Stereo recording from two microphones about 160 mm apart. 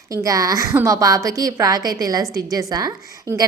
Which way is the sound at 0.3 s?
20° right (ahead or behind).